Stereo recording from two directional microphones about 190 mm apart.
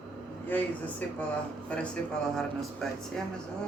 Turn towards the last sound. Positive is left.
turn(degrees=0)  # may be behind; listen again after turning